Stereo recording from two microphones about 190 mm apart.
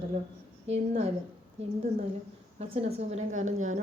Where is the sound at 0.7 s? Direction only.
35° right (ahead or behind).